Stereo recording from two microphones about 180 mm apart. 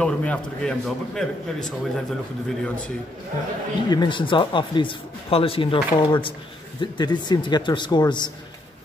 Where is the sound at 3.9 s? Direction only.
25° left (ahead or behind).